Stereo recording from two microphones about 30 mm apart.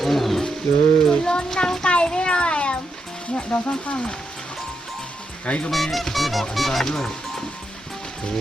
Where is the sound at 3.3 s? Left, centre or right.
Left.